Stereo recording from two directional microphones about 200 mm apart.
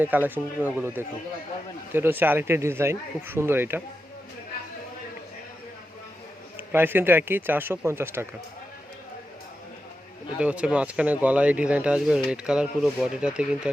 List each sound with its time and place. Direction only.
0.0 s speech: 10° right (ahead or behind)
6.6 s speech: 10° right (ahead or behind)
10.3 s speech: 5° right (ahead or behind)